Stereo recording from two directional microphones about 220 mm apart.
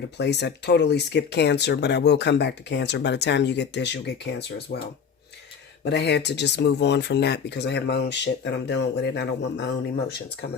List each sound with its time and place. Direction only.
0.2 s speech: 50° left (ahead or behind)
5.8 s speech: 50° left (ahead or behind)